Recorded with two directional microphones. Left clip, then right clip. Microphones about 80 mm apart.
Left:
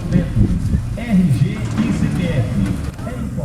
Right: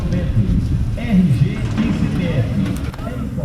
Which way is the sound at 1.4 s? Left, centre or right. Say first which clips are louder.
Even; centre.